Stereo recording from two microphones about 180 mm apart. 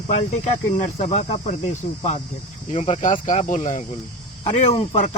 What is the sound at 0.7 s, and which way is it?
Speech, 35° left (ahead or behind).